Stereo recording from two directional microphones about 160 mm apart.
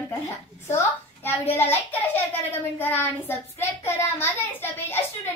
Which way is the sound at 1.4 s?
40° left (ahead or behind).